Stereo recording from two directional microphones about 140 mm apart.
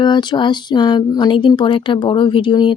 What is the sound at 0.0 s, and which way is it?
Speech, 30° left (ahead or behind).